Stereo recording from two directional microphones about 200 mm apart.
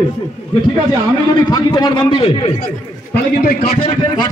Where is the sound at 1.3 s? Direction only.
20° left (ahead or behind).